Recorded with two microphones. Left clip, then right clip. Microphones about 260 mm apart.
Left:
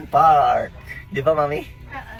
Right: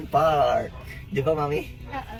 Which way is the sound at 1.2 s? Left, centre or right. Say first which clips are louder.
Left 7 dB; centre.